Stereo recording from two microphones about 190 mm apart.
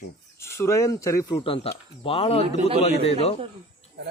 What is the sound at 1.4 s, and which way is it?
Speech, 30° left (ahead or behind).